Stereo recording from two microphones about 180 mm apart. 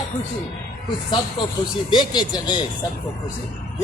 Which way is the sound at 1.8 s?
25° left (ahead or behind).